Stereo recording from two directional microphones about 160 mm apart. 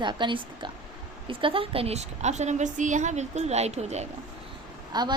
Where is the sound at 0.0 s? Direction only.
30° right (ahead or behind).